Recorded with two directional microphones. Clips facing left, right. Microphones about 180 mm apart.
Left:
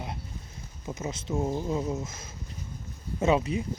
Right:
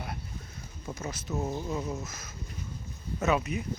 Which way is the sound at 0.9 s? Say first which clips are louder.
Left 3 dB; 20° left (ahead or behind).